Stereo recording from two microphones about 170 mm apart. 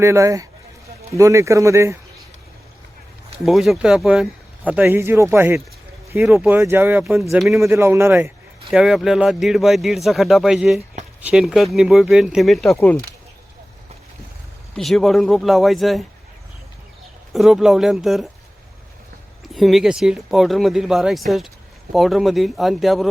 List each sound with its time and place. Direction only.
0.0 s speech: 15° right (ahead or behind)
3.4 s speech: centre (ahead or behind); by 7.3 s 15° right (ahead or behind)
7.3 s speech: centre (ahead or behind)
7.6 s speech: 15° right (ahead or behind)
8.7 s speech: centre (ahead or behind)
14.8 s speech: centre (ahead or behind)
17.3 s speech: centre (ahead or behind)
19.5 s speech: centre (ahead or behind)